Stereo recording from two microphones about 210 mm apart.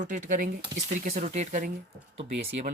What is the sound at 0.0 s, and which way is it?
Speech, 35° right (ahead or behind).